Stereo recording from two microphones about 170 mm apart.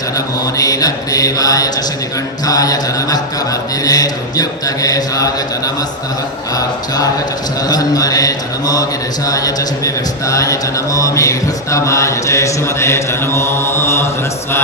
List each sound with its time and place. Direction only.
0.5 s mantra: 20° left (ahead or behind)